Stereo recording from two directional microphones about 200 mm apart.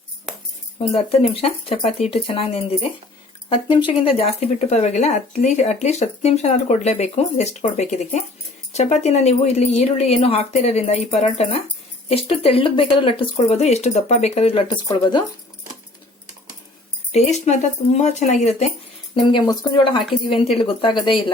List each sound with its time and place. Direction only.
1.1 s speech: 30° left (ahead or behind)
4.0 s speech: 30° left (ahead or behind)
17.1 s speech: 35° left (ahead or behind)
19.3 s speech: 25° left (ahead or behind)